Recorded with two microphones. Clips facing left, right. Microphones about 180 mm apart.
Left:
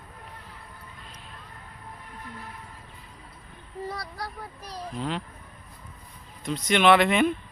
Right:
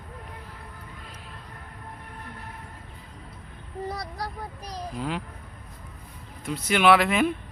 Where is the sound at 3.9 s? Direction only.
20° right (ahead or behind).